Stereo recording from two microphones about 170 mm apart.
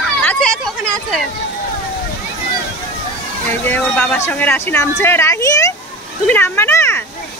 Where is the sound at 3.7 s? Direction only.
10° left (ahead or behind).